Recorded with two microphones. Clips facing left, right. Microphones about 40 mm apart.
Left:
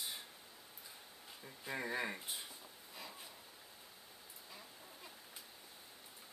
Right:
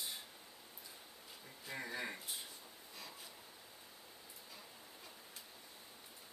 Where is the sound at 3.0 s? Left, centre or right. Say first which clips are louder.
Left 2 dB; centre.